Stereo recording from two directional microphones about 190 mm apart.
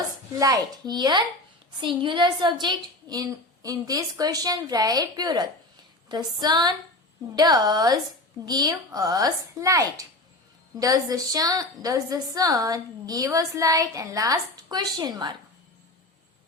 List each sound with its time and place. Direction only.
0.3 s a woman's voice: 20° right (ahead or behind)